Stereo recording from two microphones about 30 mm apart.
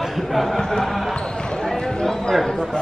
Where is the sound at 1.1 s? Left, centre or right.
Left.